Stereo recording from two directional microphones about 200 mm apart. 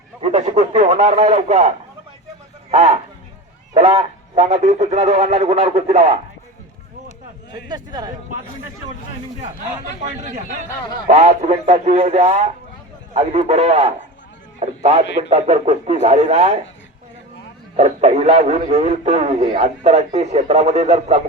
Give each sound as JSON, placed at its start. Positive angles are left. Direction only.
{"t": 0.2, "sound": "a man's voice", "side_deg": -30}
{"t": 2.7, "sound": "a man's voice", "side_deg": -30}
{"t": 7.7, "sound": "speech", "side_deg": -20}
{"t": 11.1, "sound": "a man's voice", "side_deg": -35}
{"t": 17.7, "sound": "a man's voice", "side_deg": -35}